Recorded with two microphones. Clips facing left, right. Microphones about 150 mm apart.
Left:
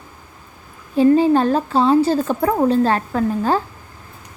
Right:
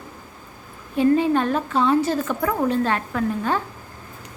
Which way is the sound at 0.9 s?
35° left (ahead or behind).